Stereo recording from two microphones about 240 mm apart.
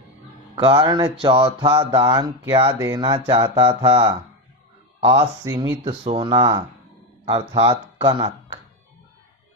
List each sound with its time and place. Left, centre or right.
0.6 s speech: centre
5.4 s speech: centre